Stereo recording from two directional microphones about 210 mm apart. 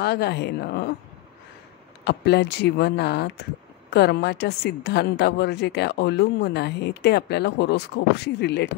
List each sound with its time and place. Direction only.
0.0 s a woman's voice: 50° left (ahead or behind)
2.0 s a woman's voice: 55° left (ahead or behind)